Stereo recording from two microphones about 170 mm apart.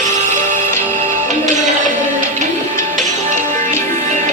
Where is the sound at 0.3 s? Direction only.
45° right (ahead or behind).